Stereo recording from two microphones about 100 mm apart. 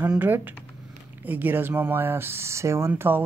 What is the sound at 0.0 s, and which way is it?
A man's voice, 15° right (ahead or behind).